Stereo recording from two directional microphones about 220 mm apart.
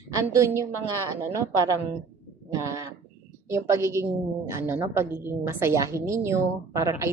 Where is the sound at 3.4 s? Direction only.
10° right (ahead or behind).